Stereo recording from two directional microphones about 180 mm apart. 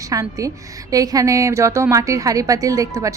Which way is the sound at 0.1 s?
20° right (ahead or behind).